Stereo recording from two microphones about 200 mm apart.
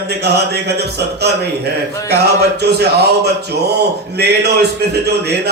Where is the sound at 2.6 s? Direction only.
55° right (ahead or behind).